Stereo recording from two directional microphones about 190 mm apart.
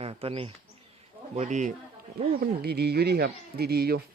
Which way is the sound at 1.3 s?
40° right (ahead or behind).